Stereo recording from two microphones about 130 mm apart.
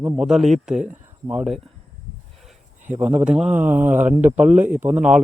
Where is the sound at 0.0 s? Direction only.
5° right (ahead or behind).